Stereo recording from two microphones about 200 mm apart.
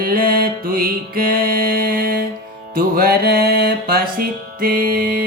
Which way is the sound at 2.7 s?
50° right (ahead or behind).